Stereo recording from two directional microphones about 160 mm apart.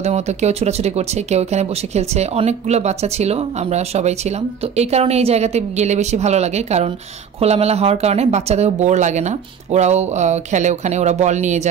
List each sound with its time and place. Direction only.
0.0 s speech: 45° right (ahead or behind)